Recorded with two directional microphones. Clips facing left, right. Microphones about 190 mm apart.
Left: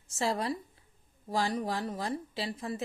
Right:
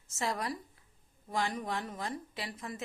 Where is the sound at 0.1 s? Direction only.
30° left (ahead or behind).